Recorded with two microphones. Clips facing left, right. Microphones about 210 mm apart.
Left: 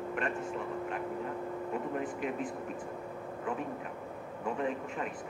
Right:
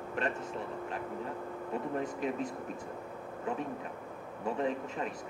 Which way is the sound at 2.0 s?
40° right (ahead or behind).